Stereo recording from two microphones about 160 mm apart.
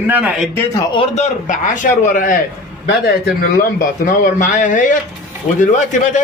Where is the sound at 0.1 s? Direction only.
10° right (ahead or behind).